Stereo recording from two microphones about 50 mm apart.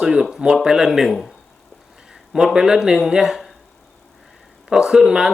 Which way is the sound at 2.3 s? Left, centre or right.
Centre.